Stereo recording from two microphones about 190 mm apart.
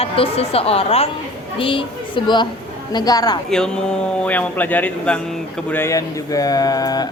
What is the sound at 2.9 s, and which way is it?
Mantra, 20° left (ahead or behind).